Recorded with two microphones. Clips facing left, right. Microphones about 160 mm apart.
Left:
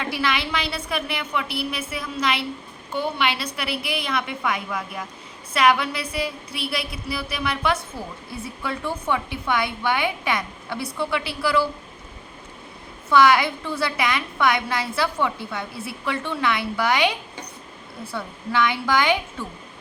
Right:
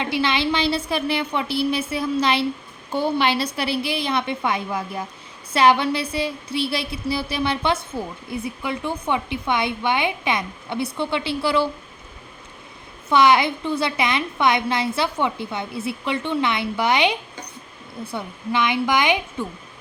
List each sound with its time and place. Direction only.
0.0 s a woman's voice: 25° right (ahead or behind)
13.1 s a woman's voice: 20° right (ahead or behind)